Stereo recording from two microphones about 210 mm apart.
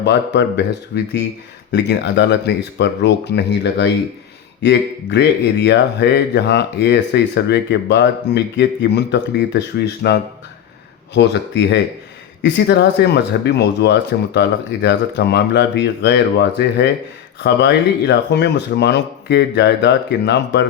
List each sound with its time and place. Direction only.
0.0 s speech: 55° left (ahead or behind)